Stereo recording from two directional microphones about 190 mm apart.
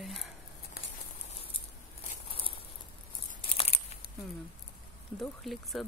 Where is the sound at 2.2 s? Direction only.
30° left (ahead or behind).